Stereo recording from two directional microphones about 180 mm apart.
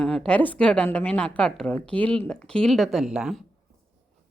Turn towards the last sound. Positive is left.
turn(degrees=0)  # may be behind; listen again after turning